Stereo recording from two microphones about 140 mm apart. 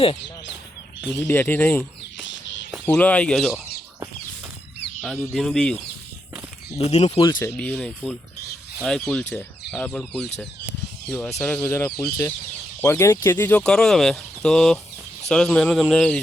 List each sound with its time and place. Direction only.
1.1 s speech: 20° left (ahead or behind)
4.9 s speech: 5° left (ahead or behind)
6.7 s speech: 50° left (ahead or behind)
7.2 s speech: 30° left (ahead or behind)
7.4 s speech: 10° left (ahead or behind)